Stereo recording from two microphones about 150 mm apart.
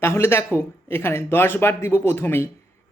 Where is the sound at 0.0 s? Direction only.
15° left (ahead or behind).